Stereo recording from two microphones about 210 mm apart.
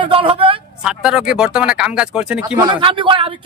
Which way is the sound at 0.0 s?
25° right (ahead or behind).